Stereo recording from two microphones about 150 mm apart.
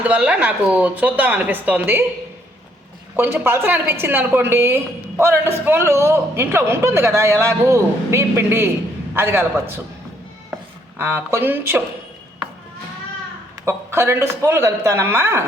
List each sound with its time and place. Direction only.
0.0 s a man's voice: 10° right (ahead or behind)
3.2 s a man's voice: 15° right (ahead or behind)
10.9 s a man's voice: 15° right (ahead or behind)
13.7 s a man's voice: 15° right (ahead or behind)